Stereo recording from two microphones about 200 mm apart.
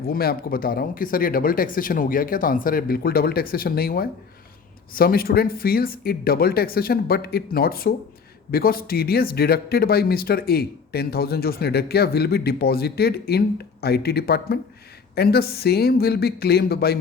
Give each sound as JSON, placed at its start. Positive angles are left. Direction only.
{"t": 0.0, "sound": "speech", "side_deg": 50}